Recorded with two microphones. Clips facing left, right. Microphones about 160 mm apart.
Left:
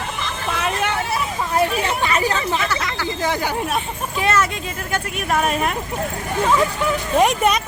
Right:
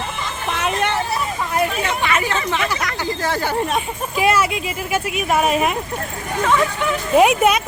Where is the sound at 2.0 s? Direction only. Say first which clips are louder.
Even; 40° left (ahead or behind).